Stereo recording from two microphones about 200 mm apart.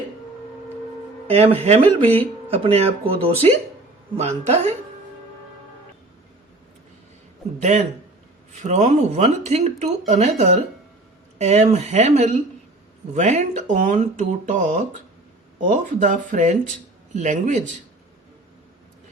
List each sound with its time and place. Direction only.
1.3 s speech: 30° right (ahead or behind)
7.6 s speech: 35° right (ahead or behind)